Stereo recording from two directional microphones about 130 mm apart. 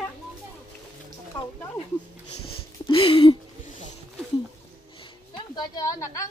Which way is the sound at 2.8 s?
40° left (ahead or behind).